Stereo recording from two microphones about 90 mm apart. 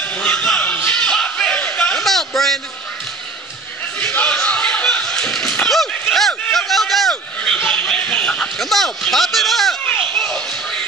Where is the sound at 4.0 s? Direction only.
15° left (ahead or behind).